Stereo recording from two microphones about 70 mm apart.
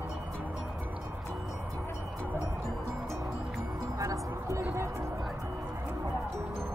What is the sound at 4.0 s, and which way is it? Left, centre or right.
Music, right.